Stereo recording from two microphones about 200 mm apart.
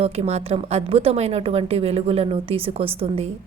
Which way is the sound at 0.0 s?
30° right (ahead or behind).